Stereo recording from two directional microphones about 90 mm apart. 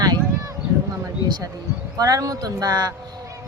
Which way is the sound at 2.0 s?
45° right (ahead or behind).